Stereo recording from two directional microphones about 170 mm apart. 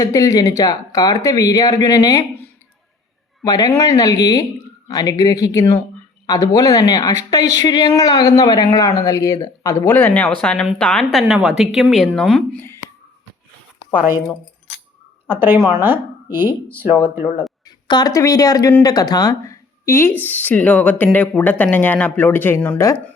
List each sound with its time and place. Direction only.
0.0 s speech: 20° left (ahead or behind)
3.4 s a woman's voice: 20° left (ahead or behind); by 12.4 s centre (ahead or behind)
15.3 s speech: 10° right (ahead or behind)
17.7 s speech: 25° left (ahead or behind)